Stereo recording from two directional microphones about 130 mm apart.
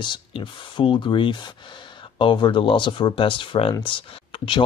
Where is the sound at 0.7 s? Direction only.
40° left (ahead or behind).